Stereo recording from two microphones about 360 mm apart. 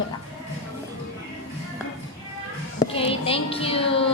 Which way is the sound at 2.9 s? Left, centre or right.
Centre.